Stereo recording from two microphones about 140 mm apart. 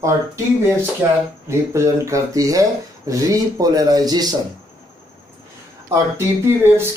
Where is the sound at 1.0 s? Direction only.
15° right (ahead or behind).